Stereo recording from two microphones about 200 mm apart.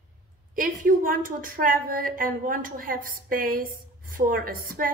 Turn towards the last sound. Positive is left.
turn(degrees=-45)  # may be behind; listen again after turning